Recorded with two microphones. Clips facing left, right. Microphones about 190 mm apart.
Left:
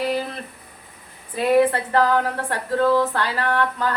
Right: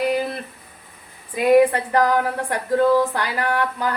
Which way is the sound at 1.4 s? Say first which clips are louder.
Right 3 dB; 15° right (ahead or behind).